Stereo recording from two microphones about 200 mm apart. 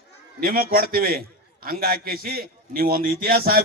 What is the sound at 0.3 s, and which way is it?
A man's voice, 45° right (ahead or behind).